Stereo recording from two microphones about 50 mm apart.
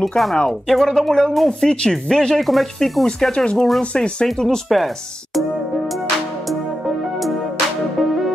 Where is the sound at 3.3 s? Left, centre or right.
Centre.